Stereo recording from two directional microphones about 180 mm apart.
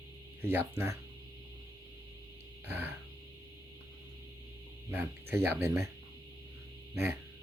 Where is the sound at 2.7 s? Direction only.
10° right (ahead or behind).